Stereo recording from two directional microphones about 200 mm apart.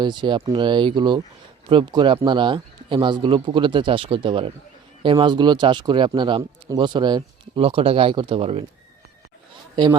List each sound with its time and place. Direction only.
0.0 s speech: 20° right (ahead or behind)